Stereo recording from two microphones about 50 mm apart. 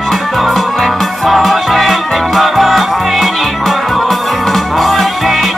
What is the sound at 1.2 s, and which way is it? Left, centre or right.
Music, centre.